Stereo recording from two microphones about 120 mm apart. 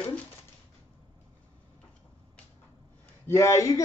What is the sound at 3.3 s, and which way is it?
Speech, 25° left (ahead or behind).